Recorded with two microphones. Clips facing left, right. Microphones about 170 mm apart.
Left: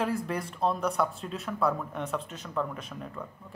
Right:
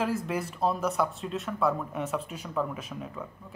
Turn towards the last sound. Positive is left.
turn(degrees=-5)  # may be behind; listen again after turning